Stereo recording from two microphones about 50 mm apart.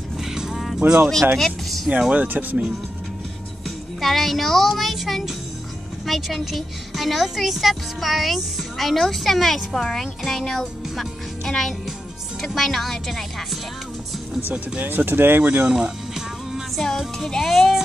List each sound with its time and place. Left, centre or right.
0.2 s vehicle: centre
0.7 s speech: centre
2.1 s speech: right
3.6 s speech: centre
14.8 s speech: right
15.4 s speech: right
15.7 s music: centre
16.7 s speech: centre